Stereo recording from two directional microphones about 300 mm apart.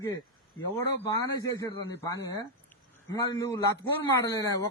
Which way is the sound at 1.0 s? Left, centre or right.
Centre.